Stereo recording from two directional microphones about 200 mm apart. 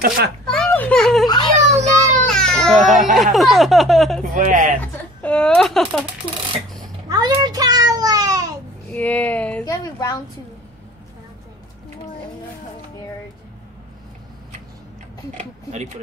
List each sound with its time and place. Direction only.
0.5 s children playing: 5° left (ahead or behind)
1.2 s a child's voice: 20° left (ahead or behind)
1.7 s a child's voice: 35° right (ahead or behind)
2.2 s baby cry: 5° left (ahead or behind)
3.3 s speech: centre (ahead or behind)
4.4 s speech: 40° right (ahead or behind)
5.2 s speech: 5° left (ahead or behind)
7.1 s a sound: 20° right (ahead or behind)
8.9 s speech: 5° left (ahead or behind)
9.7 s a sound: 20° left (ahead or behind)
15.3 s speech: 35° right (ahead or behind)